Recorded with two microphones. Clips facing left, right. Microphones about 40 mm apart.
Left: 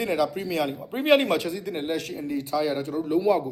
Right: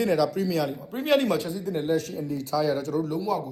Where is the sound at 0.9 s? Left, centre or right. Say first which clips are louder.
Left 4 dB; left.